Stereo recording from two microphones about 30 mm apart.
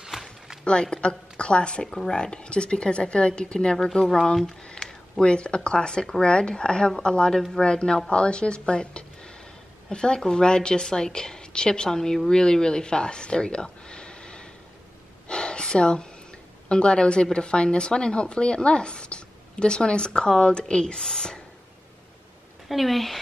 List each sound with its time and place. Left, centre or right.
0.1 s a sound: centre
0.7 s a woman's voice: left
1.9 s speech: centre
2.1 s a woman's voice: left
4.0 s speech: centre
4.8 s a sound: left
5.2 s a woman's voice: left
7.3 s speech: centre
7.6 s a woman's voice: left
15.2 s a sound: left
16.6 s a woman's voice: left
22.7 s speech: centre